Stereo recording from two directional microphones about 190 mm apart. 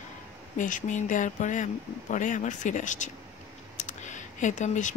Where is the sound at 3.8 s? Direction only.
40° left (ahead or behind).